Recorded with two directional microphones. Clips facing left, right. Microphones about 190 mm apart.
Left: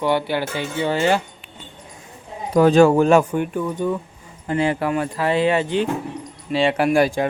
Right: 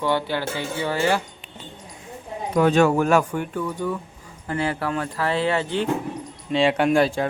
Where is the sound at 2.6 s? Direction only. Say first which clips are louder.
Left 5 dB; 35° left (ahead or behind); by 5.8 s 15° left (ahead or behind).